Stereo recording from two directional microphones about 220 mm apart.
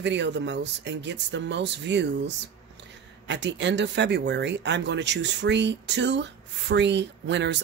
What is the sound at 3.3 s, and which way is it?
Speech, 55° right (ahead or behind).